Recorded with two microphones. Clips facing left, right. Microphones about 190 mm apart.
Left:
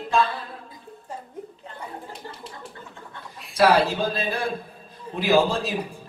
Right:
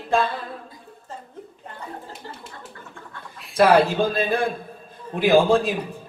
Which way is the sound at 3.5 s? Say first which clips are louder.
Right 3 dB; 55° right (ahead or behind).